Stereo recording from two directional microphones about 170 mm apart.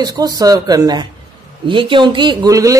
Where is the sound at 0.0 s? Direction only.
20° right (ahead or behind).